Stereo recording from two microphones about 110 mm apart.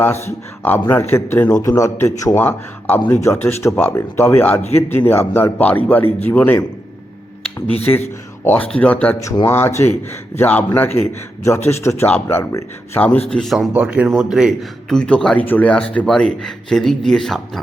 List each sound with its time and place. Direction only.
0.3 s a man's voice: 15° left (ahead or behind)
8.4 s a man's voice: 15° left (ahead or behind)
13.3 s speech: centre (ahead or behind)
13.7 s speech: 10° right (ahead or behind)
14.8 s speech: 5° left (ahead or behind)